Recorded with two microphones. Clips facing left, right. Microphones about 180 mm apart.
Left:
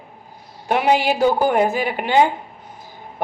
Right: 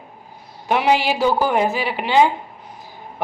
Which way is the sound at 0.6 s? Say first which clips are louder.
Left 1 dB; 45° left (ahead or behind).